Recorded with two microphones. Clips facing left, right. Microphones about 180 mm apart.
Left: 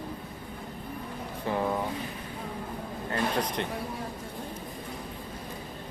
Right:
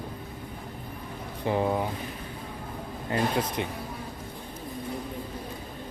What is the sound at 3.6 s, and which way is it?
Speech, 5° right (ahead or behind).